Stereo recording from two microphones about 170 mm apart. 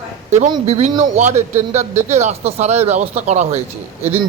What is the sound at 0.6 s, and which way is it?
A man's voice, 40° right (ahead or behind).